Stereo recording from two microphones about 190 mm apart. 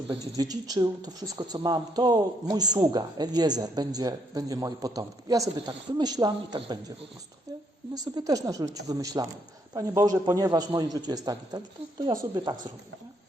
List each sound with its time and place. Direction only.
0.3 s speech: 20° right (ahead or behind)
7.9 s speech: 20° right (ahead or behind)